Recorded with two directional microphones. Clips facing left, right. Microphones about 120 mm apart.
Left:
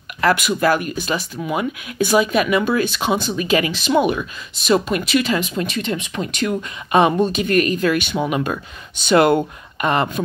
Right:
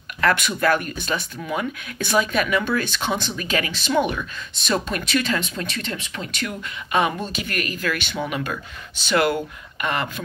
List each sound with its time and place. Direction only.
0.2 s speech: 10° left (ahead or behind); by 10.2 s 25° left (ahead or behind)